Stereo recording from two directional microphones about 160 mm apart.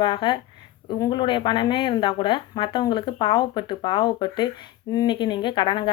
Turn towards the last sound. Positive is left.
turn(degrees=30)  # may be behind; listen again after turning